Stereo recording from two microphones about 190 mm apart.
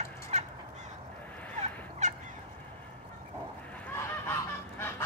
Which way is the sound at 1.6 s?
40° right (ahead or behind).